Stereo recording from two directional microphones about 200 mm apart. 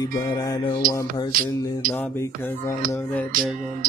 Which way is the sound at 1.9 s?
10° left (ahead or behind).